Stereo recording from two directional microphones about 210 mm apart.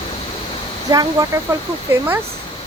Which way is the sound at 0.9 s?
20° right (ahead or behind).